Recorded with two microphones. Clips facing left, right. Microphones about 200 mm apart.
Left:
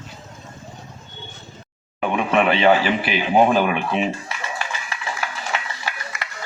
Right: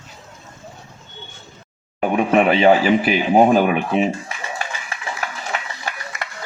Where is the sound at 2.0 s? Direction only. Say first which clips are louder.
Right 3 dB; 40° right (ahead or behind).